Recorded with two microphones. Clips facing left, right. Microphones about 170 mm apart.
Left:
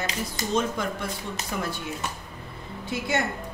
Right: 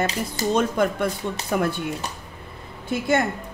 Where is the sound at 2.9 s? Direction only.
50° right (ahead or behind).